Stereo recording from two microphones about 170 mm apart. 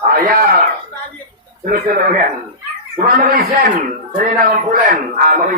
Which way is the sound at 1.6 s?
55° right (ahead or behind).